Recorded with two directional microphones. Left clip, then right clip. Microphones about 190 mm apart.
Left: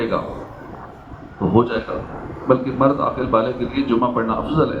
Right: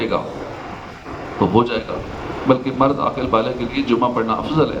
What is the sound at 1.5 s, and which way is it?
A man's voice, 45° right (ahead or behind).